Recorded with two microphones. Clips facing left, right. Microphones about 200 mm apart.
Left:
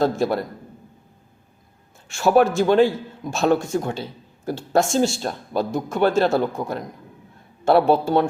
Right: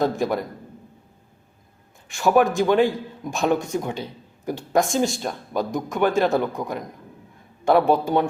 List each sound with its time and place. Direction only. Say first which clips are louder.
0.0 s a man's voice: left 2 dB; 15° right (ahead or behind)
2.0 s a man's voice: left 2 dB; 15° right (ahead or behind)
7.9 s a man's voice: left 2 dB; 15° right (ahead or behind)